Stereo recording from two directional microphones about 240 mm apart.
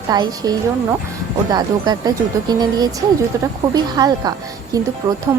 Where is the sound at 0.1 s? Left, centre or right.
Centre.